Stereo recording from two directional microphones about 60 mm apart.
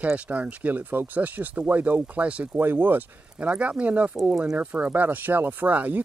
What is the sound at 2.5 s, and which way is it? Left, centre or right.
Speech, right.